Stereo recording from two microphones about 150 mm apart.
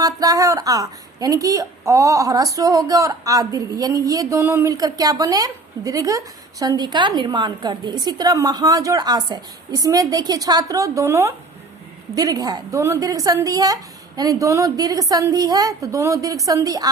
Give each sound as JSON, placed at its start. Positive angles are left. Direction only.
{"t": 0.0, "sound": "speech", "side_deg": -25}